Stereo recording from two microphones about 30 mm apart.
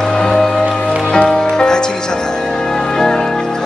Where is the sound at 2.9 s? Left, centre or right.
Left.